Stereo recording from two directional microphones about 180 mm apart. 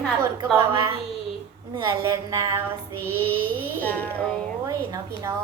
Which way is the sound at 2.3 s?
20° right (ahead or behind).